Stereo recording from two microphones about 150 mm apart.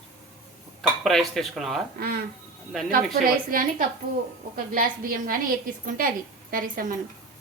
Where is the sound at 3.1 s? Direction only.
70° right (ahead or behind).